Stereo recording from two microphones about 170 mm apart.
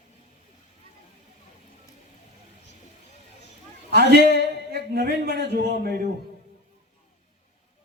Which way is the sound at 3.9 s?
70° right (ahead or behind).